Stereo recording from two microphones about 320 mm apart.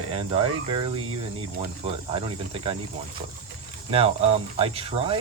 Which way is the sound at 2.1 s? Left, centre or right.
Centre.